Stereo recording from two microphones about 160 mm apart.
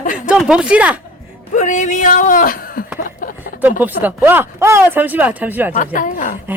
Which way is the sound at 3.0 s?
60° left (ahead or behind).